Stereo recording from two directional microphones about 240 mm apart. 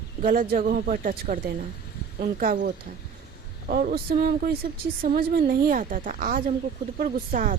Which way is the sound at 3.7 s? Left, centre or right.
Right.